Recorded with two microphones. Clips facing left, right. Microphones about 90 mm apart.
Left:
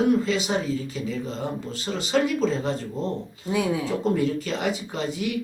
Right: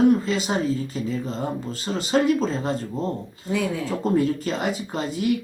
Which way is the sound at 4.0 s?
40° right (ahead or behind).